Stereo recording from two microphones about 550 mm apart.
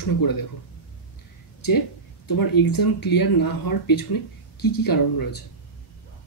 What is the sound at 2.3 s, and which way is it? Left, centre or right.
Speech, left.